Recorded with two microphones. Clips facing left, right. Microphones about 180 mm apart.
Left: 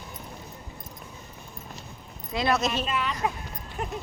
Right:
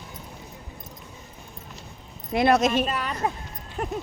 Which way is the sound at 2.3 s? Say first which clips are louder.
Right 6 dB; 50° right (ahead or behind).